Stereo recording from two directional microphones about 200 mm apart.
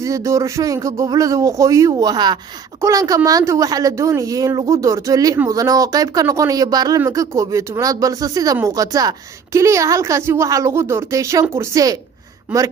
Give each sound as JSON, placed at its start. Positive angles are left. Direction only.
{"t": 0.0, "sound": "speech", "side_deg": -15}